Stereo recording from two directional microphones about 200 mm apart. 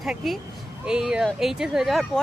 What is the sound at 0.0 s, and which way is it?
A woman's voice, centre (ahead or behind).